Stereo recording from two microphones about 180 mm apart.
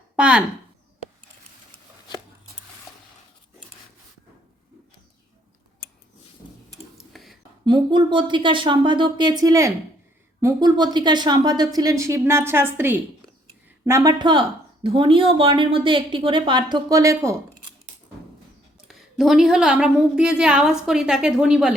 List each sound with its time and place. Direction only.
0.2 s speech: 5° right (ahead or behind)
7.1 s a sound: centre (ahead or behind)
7.6 s a woman's voice: 25° right (ahead or behind)
18.9 s a woman's voice: centre (ahead or behind)